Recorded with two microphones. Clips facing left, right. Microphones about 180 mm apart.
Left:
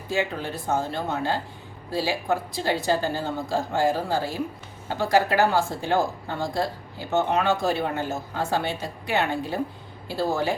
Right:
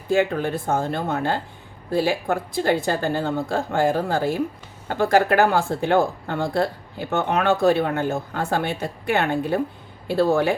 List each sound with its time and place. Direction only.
0.1 s speech: 55° right (ahead or behind)